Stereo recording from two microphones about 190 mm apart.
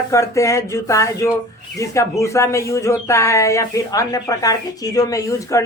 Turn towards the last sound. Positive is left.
turn(degrees=15)  # may be behind; listen again after turning